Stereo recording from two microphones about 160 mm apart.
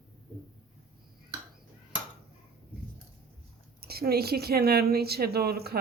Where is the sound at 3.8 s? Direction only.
75° right (ahead or behind).